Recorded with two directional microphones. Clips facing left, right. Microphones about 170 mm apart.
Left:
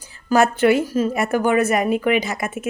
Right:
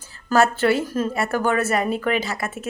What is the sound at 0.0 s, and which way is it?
A woman's voice, 15° left (ahead or behind).